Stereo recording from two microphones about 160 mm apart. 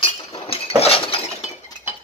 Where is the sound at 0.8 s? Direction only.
40° left (ahead or behind).